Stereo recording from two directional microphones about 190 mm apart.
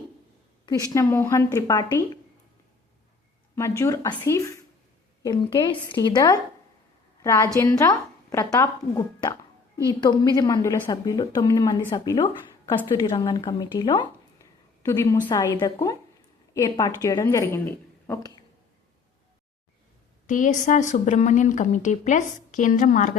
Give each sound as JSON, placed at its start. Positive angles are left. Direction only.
{"t": 0.9, "sound": "speech", "side_deg": 15}
{"t": 3.5, "sound": "a woman's voice", "side_deg": 15}
{"t": 20.2, "sound": "a woman's voice", "side_deg": 40}